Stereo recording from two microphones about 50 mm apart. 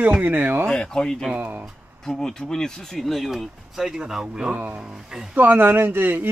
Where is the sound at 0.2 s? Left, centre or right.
Right.